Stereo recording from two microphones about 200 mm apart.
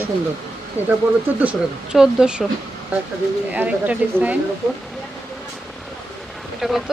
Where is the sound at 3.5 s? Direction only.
5° right (ahead or behind).